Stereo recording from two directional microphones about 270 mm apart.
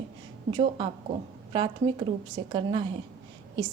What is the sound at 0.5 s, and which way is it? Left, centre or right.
A woman's voice, centre.